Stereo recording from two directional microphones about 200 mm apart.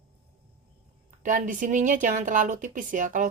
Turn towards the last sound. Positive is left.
turn(degrees=-40)  # may be behind; listen again after turning